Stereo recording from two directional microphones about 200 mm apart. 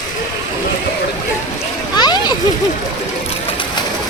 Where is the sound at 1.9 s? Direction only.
20° left (ahead or behind).